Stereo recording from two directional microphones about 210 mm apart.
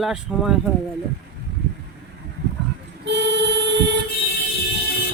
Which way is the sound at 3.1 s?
55° right (ahead or behind).